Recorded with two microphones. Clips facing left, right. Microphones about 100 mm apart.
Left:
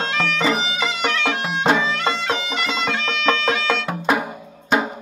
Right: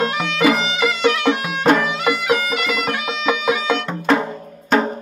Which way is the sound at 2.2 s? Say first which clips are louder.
Right 4 dB; 5° right (ahead or behind).